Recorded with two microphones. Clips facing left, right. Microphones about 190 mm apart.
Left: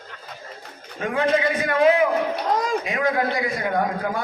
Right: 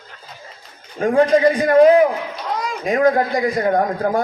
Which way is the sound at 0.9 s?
40° right (ahead or behind).